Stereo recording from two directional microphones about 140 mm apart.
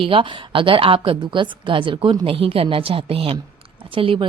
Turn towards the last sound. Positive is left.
turn(degrees=-40)  # may be behind; listen again after turning